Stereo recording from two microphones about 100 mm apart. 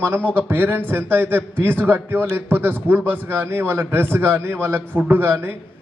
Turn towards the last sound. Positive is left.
turn(degrees=-25)  # may be behind; listen again after turning